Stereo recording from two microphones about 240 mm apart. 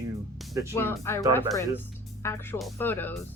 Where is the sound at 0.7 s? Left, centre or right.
Centre.